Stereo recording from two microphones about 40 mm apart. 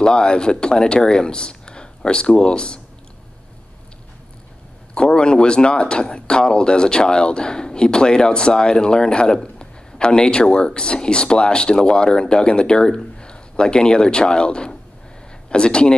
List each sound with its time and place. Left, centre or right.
0.0 s speech: left
4.9 s speech: left